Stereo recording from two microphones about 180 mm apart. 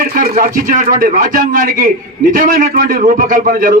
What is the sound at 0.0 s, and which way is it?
A man's voice, 55° right (ahead or behind).